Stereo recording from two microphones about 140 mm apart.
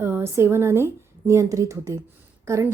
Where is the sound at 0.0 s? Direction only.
15° right (ahead or behind).